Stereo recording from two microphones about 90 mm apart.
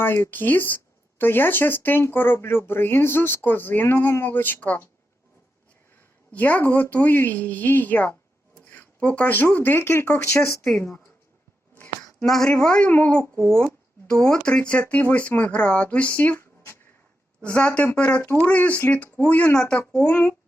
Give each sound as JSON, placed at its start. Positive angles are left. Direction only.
{"t": 0.0, "sound": "speech", "side_deg": 25}
{"t": 6.3, "sound": "speech", "side_deg": 20}
{"t": 12.2, "sound": "speech", "side_deg": 5}
{"t": 17.4, "sound": "speech", "side_deg": 10}